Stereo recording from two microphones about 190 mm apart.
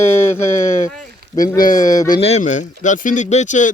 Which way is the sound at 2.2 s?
35° left (ahead or behind).